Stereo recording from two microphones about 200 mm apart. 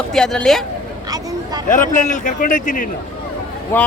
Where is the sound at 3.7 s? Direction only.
10° left (ahead or behind).